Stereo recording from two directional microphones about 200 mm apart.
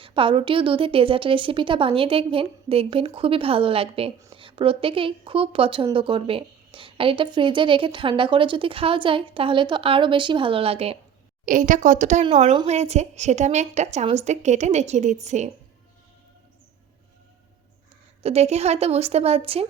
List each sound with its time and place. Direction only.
0.0 s speech: 25° right (ahead or behind)
11.4 s a woman's voice: 40° right (ahead or behind)
18.2 s a woman's voice: 30° right (ahead or behind)